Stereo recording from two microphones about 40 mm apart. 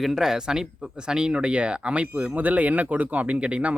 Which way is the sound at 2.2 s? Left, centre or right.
Right.